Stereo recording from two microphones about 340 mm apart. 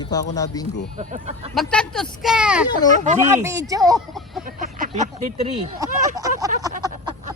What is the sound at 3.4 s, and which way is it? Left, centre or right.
Speech, centre.